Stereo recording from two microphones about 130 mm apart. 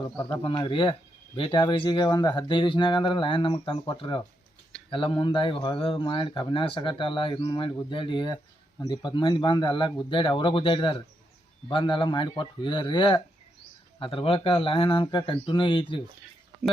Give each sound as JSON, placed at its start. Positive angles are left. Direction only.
{"t": 0.2, "sound": "speech", "side_deg": 35}